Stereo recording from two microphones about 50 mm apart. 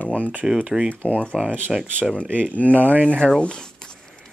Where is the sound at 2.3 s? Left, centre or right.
Right.